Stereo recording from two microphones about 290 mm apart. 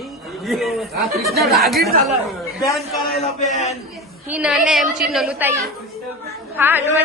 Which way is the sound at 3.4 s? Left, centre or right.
Left.